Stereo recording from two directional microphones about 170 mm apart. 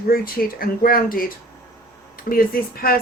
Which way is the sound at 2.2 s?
60° left (ahead or behind).